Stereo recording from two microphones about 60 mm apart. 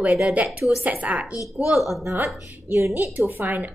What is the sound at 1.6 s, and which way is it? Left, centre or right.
Speech, centre.